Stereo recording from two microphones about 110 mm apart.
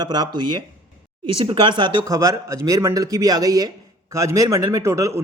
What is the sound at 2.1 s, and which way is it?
A man's voice, 30° right (ahead or behind).